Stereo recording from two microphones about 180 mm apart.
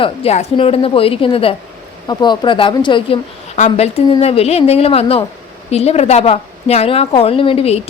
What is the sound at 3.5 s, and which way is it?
A woman's voice, 40° left (ahead or behind).